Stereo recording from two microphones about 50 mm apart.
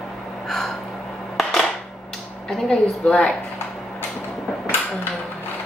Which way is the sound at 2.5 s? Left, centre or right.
Centre.